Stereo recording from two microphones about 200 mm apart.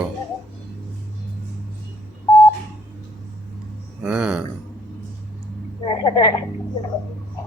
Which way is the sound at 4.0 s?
5° right (ahead or behind).